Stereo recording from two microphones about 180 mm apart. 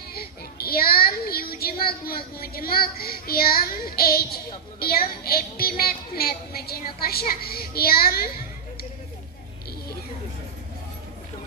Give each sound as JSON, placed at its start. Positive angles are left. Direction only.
{"t": 0.1, "sound": "speech", "side_deg": 60}